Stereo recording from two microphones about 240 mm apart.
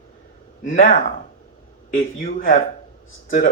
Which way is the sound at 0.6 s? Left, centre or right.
Left.